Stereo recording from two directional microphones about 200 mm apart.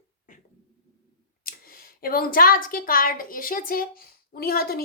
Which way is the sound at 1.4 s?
45° left (ahead or behind).